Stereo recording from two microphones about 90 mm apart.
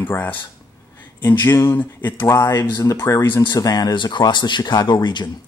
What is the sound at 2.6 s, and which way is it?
Speech, 40° left (ahead or behind).